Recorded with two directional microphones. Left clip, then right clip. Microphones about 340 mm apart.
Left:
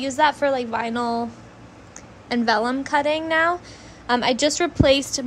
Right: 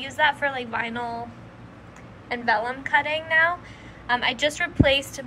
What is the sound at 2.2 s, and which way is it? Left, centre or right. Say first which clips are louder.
A woman's voice: left 3 dB; left.